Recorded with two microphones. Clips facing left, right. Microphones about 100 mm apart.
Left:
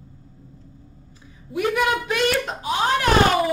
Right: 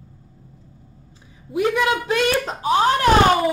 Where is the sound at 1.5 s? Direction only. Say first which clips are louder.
Right 2 dB; 25° right (ahead or behind).